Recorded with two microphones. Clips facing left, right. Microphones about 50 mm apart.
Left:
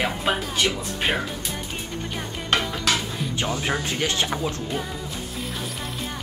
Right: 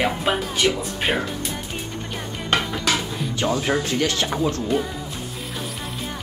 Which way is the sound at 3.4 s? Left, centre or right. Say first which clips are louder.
Right 6 dB; centre.